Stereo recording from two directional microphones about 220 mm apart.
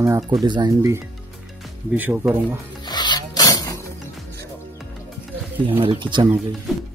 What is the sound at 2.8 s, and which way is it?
Filing, 20° left (ahead or behind).